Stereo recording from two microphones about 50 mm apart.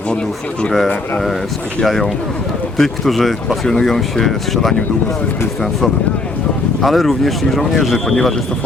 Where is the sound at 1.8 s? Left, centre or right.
Centre.